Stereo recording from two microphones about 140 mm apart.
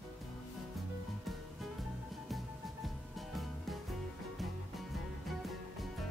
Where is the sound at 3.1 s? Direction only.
Centre (ahead or behind).